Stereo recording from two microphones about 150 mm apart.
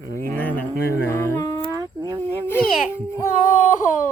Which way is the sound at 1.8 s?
25° right (ahead or behind).